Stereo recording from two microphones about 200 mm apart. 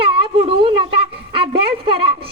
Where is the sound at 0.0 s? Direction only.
30° right (ahead or behind).